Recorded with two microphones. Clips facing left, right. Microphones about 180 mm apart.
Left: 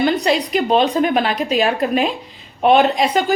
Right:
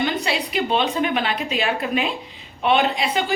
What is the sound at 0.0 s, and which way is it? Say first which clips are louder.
A woman's voice: left 7 dB; 40° left (ahead or behind).